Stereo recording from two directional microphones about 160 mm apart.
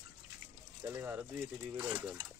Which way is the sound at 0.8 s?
15° right (ahead or behind).